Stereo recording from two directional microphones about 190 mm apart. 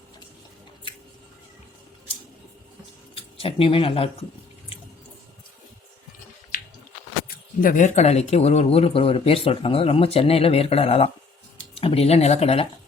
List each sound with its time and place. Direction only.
3.2 s speech: 30° left (ahead or behind)
7.3 s speech: 50° left (ahead or behind); by 12.6 s 35° left (ahead or behind)